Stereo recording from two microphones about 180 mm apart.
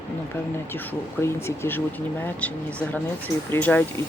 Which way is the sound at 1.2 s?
15° left (ahead or behind).